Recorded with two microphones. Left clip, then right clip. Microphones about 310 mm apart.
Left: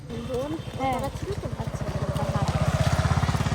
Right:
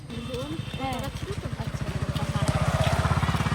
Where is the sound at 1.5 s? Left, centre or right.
Left.